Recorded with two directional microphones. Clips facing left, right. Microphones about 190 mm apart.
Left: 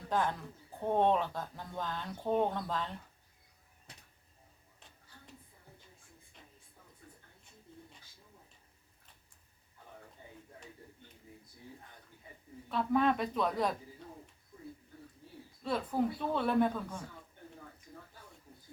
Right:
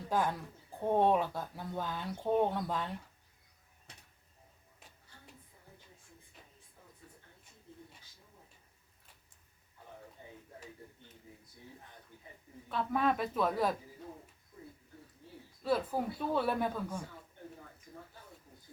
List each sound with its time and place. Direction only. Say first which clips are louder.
0.1 s speech: even; 10° right (ahead or behind)
7.0 s a sound: left 1 dB; 50° left (ahead or behind)
12.6 s speech: left 2 dB; centre (ahead or behind)
15.6 s speech: even; 5° right (ahead or behind)